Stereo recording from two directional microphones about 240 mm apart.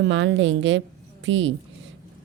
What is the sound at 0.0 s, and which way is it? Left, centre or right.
A woman's voice, right.